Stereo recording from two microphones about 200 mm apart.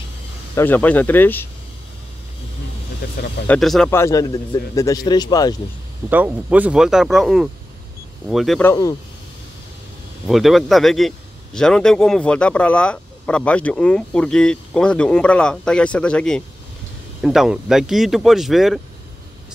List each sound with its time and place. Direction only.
0.6 s speech: 10° left (ahead or behind)
3.4 s a man's voice: centre (ahead or behind)
3.9 s a man's voice: 15° left (ahead or behind)
6.0 s a man's voice: 10° right (ahead or behind)
8.6 s speech: 15° left (ahead or behind)
10.2 s a man's voice: centre (ahead or behind)